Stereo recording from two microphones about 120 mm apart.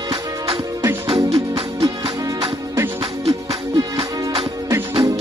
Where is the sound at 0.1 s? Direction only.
30° right (ahead or behind).